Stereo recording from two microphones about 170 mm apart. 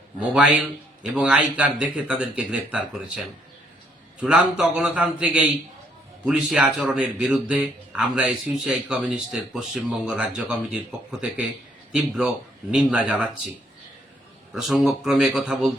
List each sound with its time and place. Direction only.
0.2 s a man's voice: 5° right (ahead or behind)
11.9 s a man's voice: 5° right (ahead or behind)
14.5 s a man's voice: 5° right (ahead or behind)